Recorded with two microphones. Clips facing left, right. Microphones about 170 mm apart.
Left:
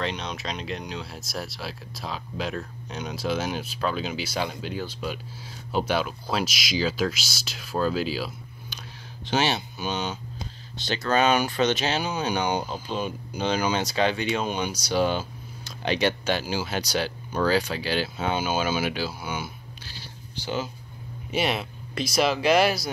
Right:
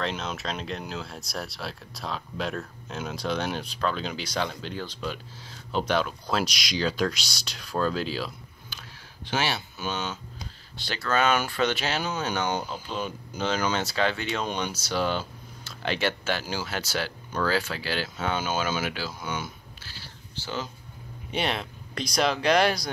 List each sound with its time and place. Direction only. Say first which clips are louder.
0.0 s speech: even; 5° right (ahead or behind)
8.6 s speech: left 4 dB; 20° left (ahead or behind)